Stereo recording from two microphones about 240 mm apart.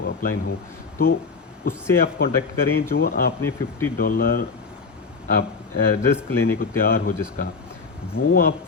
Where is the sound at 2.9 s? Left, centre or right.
Left.